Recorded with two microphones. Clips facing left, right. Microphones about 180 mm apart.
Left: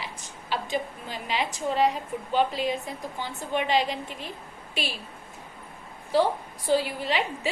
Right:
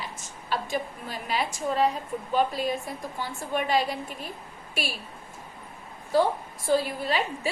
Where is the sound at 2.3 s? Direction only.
45° right (ahead or behind).